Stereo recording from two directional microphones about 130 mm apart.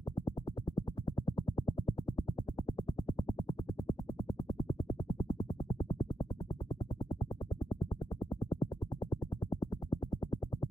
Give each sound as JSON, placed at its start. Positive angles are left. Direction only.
{"t": 0.7, "sound": "music", "side_deg": 35}
{"t": 8.2, "sound": "music", "side_deg": 35}